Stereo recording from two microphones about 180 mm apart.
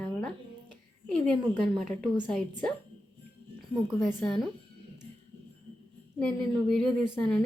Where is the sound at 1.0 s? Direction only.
5° left (ahead or behind).